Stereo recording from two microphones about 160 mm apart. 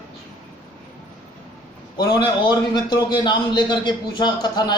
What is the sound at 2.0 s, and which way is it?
A man's voice, 25° left (ahead or behind).